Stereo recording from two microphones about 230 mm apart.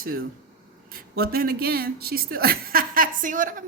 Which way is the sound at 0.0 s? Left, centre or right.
Right.